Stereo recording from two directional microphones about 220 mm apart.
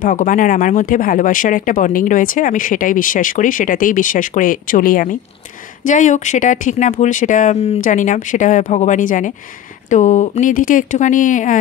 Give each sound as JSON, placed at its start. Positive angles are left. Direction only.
{"t": 0.0, "sound": "speech", "side_deg": 35}